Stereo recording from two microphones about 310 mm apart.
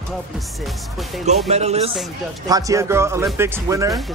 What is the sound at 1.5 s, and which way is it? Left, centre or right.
Speech, right.